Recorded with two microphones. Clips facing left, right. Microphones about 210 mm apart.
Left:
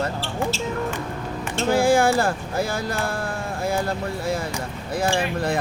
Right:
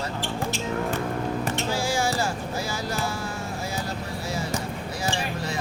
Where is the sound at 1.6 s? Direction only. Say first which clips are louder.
Left 12 dB; 55° left (ahead or behind).